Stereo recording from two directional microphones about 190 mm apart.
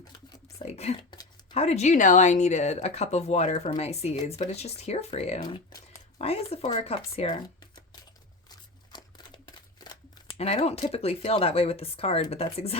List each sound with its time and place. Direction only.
0.4 s speech: 35° left (ahead or behind)
8.9 s a sound: 20° left (ahead or behind)
10.3 s speech: 35° left (ahead or behind)